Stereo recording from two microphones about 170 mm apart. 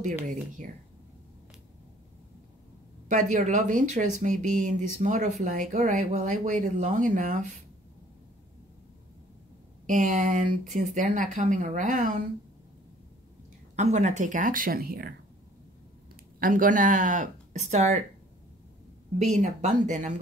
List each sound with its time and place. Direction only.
3.1 s speech: 50° right (ahead or behind)
9.8 s speech: 50° right (ahead or behind)
13.7 s speech: 45° right (ahead or behind); by 15.1 s 65° right (ahead or behind)
16.3 s speech: 55° right (ahead or behind)
19.1 s speech: 45° right (ahead or behind)